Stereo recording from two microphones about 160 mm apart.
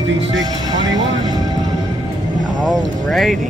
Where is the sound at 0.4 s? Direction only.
25° right (ahead or behind).